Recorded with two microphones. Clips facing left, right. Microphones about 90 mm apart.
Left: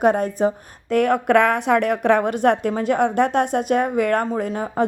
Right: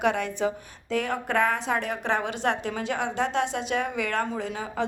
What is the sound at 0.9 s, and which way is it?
A woman's voice, 60° left (ahead or behind).